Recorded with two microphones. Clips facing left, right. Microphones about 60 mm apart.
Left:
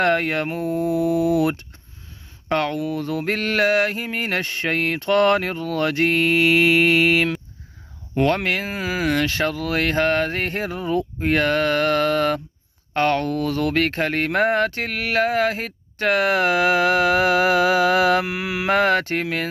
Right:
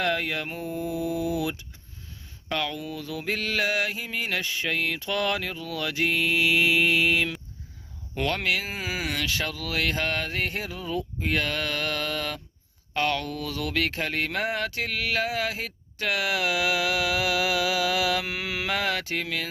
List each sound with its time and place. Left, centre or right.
0.0 s speech: left
0.6 s mantra: left
2.5 s speech: left
8.4 s speech: left
18.3 s a sound: centre
18.7 s speech: left